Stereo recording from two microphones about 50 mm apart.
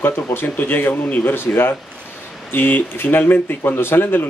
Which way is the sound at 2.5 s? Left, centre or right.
Left.